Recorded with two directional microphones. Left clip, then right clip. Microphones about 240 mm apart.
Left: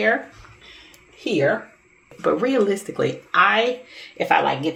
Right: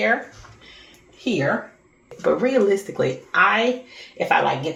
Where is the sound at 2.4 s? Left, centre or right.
Left.